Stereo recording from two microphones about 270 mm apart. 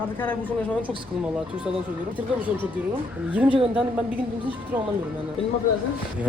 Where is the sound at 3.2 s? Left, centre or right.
Centre.